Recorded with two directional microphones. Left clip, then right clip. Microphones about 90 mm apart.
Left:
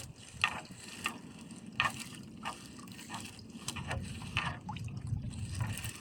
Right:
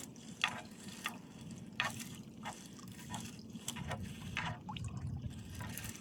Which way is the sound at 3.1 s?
20° left (ahead or behind).